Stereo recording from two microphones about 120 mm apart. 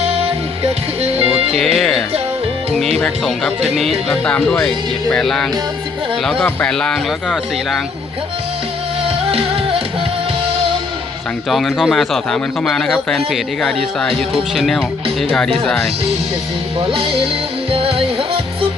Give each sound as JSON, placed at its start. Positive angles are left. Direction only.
{"t": 0.0, "sound": "music", "side_deg": -55}
{"t": 1.5, "sound": "a man's voice", "side_deg": 5}
{"t": 3.0, "sound": "music", "side_deg": 10}
{"t": 5.1, "sound": "a man's voice", "side_deg": 5}
{"t": 9.3, "sound": "music", "side_deg": -50}
{"t": 11.4, "sound": "a man's voice", "side_deg": 0}
{"t": 15.6, "sound": "music", "side_deg": 5}
{"t": 16.8, "sound": "speech", "side_deg": -50}
{"t": 17.7, "sound": "music", "side_deg": -50}